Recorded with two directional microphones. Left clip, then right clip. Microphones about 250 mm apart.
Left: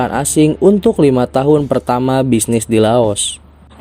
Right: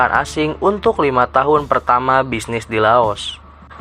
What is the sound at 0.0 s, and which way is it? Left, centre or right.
Speech, left.